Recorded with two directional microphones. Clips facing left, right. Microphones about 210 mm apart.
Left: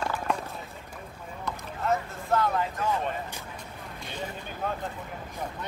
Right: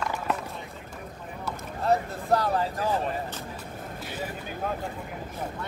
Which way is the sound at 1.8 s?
35° right (ahead or behind).